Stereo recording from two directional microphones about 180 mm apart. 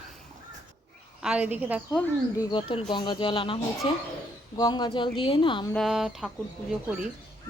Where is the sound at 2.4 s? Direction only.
30° left (ahead or behind).